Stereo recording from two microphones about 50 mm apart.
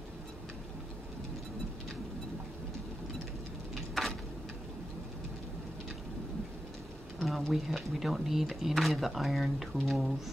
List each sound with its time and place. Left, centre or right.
7.2 s speech: centre